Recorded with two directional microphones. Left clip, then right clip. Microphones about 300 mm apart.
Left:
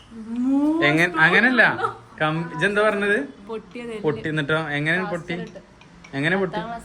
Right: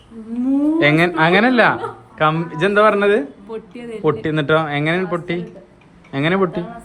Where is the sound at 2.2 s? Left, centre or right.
Centre.